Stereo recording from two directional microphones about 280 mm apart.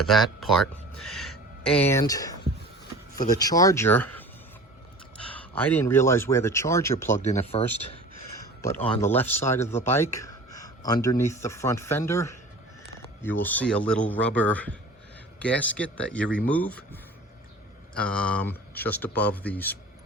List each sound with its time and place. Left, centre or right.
0.0 s speech: centre
5.3 s speech: centre
7.3 s speech: left
8.6 s speech: centre